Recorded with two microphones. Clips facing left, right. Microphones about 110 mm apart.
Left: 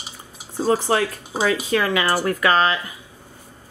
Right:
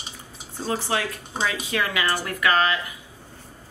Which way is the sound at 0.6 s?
40° left (ahead or behind).